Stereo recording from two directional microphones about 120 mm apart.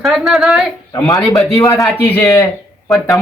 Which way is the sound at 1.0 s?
30° left (ahead or behind).